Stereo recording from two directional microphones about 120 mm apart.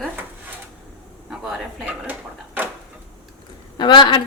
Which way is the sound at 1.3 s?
5° right (ahead or behind).